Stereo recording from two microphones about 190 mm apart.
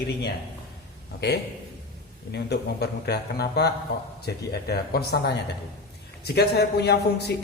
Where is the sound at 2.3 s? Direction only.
60° left (ahead or behind).